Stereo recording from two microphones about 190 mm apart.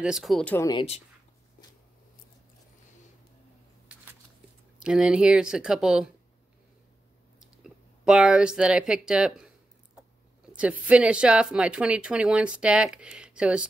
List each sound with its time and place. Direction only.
0.0 s speech: centre (ahead or behind)
0.6 s speech: 20° left (ahead or behind)
3.9 s a sound: 10° right (ahead or behind)
4.7 s speech: 5° right (ahead or behind)
7.3 s speech: 5° right (ahead or behind)
10.5 s speech: 5° right (ahead or behind)